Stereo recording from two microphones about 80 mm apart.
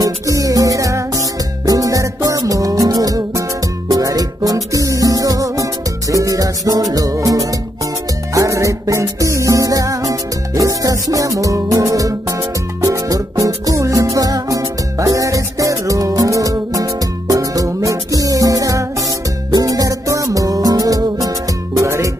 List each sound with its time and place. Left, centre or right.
0.0 s music: right